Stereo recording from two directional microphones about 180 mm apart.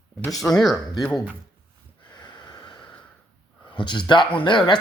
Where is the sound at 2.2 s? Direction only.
25° left (ahead or behind).